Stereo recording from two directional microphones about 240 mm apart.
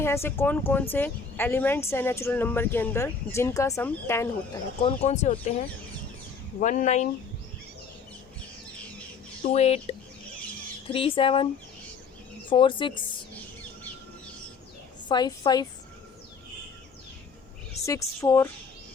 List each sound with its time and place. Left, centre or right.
0.0 s speech: centre
4.8 s speech: left
9.4 s speech: left
10.9 s speech: left
12.5 s speech: left
15.1 s speech: centre
17.8 s speech: centre